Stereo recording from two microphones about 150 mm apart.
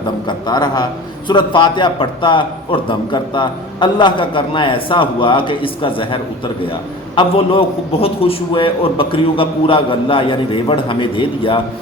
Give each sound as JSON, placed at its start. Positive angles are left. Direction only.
{"t": 0.3, "sound": "a man's voice", "side_deg": 30}